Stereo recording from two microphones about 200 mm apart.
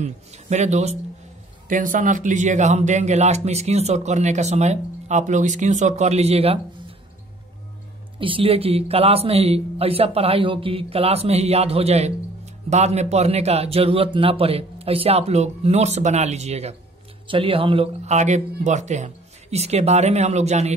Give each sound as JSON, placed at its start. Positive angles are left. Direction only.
{"t": 0.0, "sound": "speech", "side_deg": -35}
{"t": 8.2, "sound": "speech", "side_deg": -25}